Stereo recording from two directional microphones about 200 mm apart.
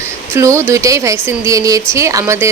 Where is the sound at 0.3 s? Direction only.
15° right (ahead or behind).